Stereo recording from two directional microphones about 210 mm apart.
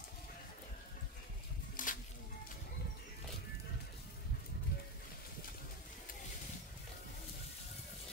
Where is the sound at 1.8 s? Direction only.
40° left (ahead or behind).